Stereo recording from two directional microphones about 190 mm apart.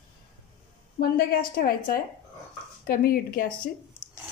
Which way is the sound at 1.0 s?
50° left (ahead or behind).